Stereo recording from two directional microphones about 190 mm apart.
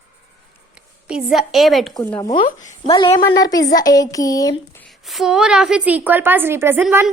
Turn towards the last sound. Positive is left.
turn(degrees=-5)  # may be behind; listen again after turning